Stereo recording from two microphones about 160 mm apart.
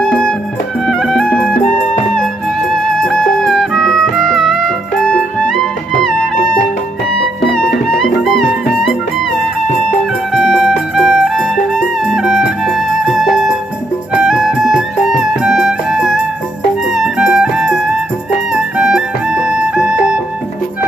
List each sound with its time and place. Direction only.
0.0 s music: 5° left (ahead or behind)
3.0 s music: 5° left (ahead or behind)
6.3 s music: 60° left (ahead or behind)
7.9 s music: centre (ahead or behind)
10.3 s music: 5° right (ahead or behind)